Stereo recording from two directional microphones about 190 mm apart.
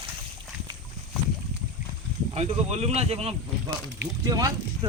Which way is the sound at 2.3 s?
35° right (ahead or behind).